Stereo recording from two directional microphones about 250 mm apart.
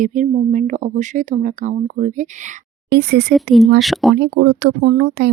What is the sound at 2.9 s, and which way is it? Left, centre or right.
Speech, right.